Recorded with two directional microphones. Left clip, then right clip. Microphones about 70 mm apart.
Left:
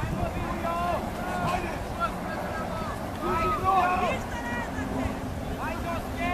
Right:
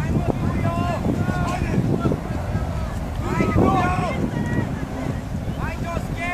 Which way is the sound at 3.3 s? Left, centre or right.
Right.